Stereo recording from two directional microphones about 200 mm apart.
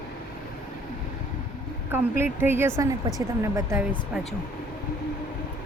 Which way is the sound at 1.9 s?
10° right (ahead or behind).